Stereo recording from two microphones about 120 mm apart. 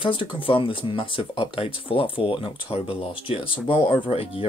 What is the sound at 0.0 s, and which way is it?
Speech, 45° left (ahead or behind).